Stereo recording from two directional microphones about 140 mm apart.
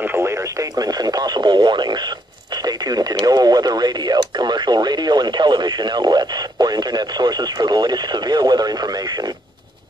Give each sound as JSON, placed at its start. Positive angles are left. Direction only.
{"t": 0.0, "sound": "speech", "side_deg": -15}